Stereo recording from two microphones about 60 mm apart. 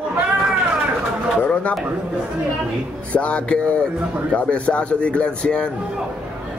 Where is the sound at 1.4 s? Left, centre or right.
Left.